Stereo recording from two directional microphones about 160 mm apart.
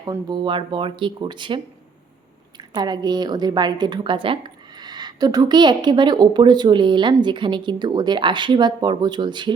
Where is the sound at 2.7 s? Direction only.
25° right (ahead or behind).